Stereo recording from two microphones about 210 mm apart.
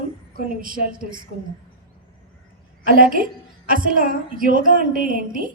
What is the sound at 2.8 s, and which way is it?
A woman's voice, 40° right (ahead or behind).